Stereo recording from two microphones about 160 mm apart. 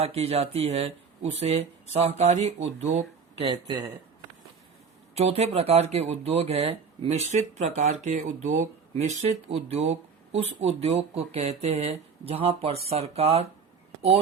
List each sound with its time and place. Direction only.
0.0 s speech: 40° right (ahead or behind)
5.1 s speech: 40° right (ahead or behind)